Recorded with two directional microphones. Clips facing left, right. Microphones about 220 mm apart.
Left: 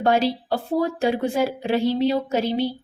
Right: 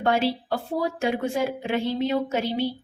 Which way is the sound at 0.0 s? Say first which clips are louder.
Left 3 dB; 35° left (ahead or behind).